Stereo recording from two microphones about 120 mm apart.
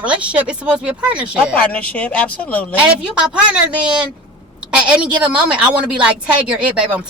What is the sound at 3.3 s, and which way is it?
Speech, 10° right (ahead or behind).